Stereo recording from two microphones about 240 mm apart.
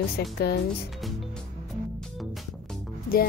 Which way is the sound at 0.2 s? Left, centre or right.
Left.